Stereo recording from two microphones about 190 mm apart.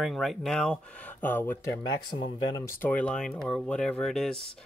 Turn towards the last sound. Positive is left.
turn(degrees=0)  # may be behind; listen again after turning